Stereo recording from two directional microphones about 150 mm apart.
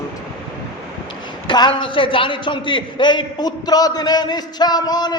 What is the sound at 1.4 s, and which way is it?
A man's voice, 30° left (ahead or behind).